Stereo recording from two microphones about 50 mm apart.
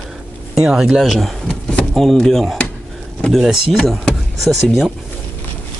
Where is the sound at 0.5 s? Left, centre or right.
Centre.